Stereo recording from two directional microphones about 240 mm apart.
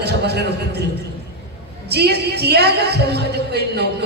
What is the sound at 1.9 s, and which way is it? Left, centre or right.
A man's voice, right.